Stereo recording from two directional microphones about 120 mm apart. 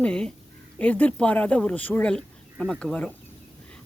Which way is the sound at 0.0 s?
5° left (ahead or behind).